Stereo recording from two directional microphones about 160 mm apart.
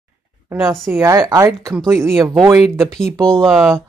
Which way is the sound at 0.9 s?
20° right (ahead or behind).